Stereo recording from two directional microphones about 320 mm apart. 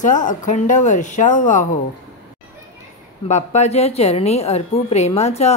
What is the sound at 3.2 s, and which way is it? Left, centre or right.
Speech, left.